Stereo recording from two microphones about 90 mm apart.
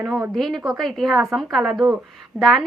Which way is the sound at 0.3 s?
Centre (ahead or behind).